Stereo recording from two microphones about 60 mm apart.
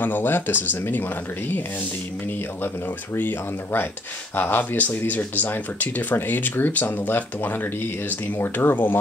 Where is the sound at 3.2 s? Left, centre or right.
Left.